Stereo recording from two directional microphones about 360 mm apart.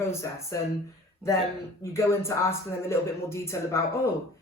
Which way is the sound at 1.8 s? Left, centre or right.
Centre.